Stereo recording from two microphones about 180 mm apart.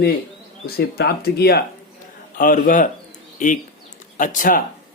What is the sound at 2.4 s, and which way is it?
Speech, 50° left (ahead or behind).